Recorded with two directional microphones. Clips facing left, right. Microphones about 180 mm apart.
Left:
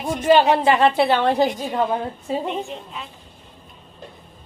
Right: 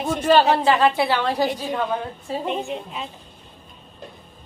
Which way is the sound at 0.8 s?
25° left (ahead or behind).